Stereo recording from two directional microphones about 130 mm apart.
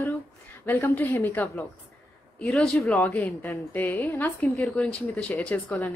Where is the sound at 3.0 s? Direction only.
20° left (ahead or behind).